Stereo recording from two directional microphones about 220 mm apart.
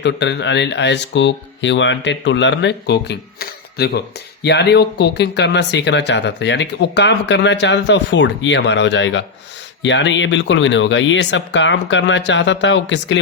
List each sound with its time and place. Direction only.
0.0 s speech: 50° left (ahead or behind)